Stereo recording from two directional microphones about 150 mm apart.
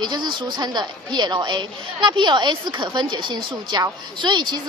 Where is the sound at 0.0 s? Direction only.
30° right (ahead or behind).